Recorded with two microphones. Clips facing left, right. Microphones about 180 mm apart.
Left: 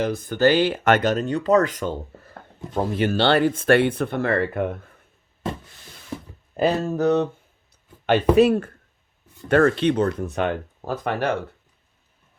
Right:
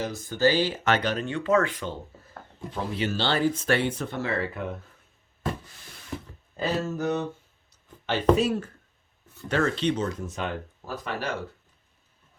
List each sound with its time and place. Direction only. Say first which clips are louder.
0.0 s speech: left 5 dB; 60° left (ahead or behind)
6.6 s speech: left 7 dB; 60° left (ahead or behind)
8.4 s speech: left 9 dB; 60° left (ahead or behind)